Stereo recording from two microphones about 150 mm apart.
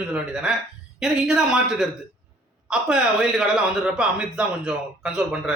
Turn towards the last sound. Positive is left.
turn(degrees=-5)  # may be behind; listen again after turning